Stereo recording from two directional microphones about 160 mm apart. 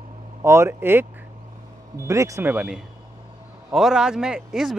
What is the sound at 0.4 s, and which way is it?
Speech, 15° right (ahead or behind).